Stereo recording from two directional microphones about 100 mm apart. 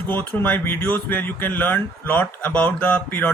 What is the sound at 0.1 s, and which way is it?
Speech, 20° left (ahead or behind).